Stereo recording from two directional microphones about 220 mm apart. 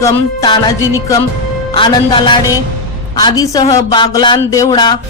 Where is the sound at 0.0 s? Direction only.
15° left (ahead or behind).